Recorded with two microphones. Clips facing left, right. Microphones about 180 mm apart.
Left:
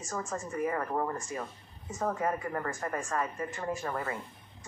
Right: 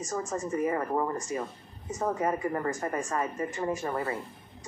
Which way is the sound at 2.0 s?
20° right (ahead or behind).